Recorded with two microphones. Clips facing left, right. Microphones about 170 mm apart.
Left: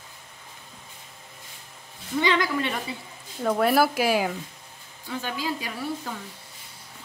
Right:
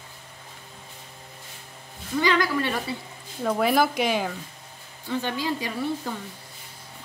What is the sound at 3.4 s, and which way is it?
Speech, centre (ahead or behind).